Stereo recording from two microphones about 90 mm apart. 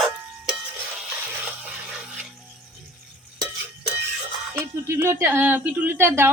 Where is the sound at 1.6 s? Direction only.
10° right (ahead or behind).